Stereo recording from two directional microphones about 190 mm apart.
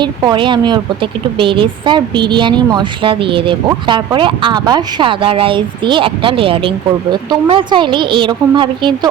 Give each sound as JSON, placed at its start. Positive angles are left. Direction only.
{"t": 0.0, "sound": "a woman's voice", "side_deg": -20}